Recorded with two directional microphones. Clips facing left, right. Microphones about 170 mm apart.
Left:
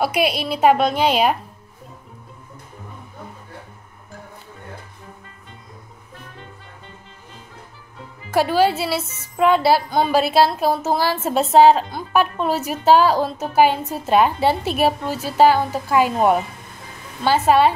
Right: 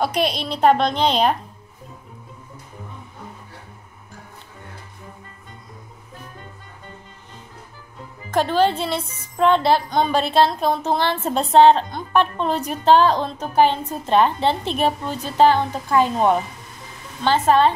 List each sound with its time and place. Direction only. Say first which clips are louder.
0.0 s a woman's voice: left 2 dB; 10° left (ahead or behind)
8.3 s a woman's voice: left 1 dB; 10° left (ahead or behind)